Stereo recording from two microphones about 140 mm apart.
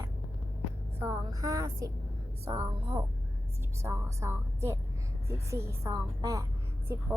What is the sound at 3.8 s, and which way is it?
A woman's voice, 20° right (ahead or behind).